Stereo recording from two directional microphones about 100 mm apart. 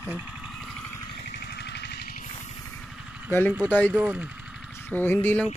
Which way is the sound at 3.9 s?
15° right (ahead or behind).